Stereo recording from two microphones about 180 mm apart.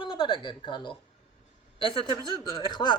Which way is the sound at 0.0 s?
25° left (ahead or behind).